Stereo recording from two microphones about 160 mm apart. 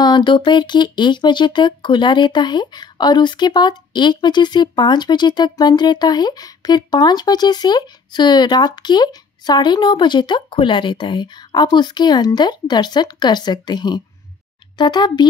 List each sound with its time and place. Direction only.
0.0 s speech: 30° left (ahead or behind)